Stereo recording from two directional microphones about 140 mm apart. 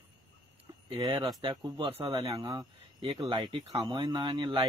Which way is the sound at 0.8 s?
40° right (ahead or behind).